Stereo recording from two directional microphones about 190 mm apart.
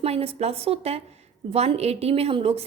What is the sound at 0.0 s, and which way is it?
A woman's voice, 30° right (ahead or behind).